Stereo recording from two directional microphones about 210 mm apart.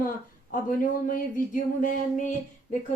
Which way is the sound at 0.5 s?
40° left (ahead or behind).